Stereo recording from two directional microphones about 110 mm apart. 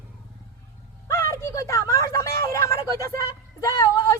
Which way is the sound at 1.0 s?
25° left (ahead or behind).